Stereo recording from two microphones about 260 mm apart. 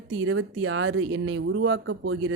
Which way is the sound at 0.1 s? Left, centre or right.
Right.